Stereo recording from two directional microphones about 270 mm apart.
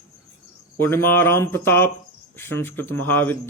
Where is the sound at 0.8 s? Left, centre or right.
Centre.